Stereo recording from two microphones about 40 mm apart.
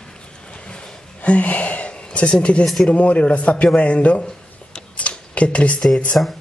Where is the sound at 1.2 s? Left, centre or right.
Left.